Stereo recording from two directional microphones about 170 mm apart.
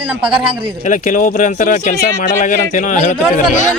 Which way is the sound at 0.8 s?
50° left (ahead or behind).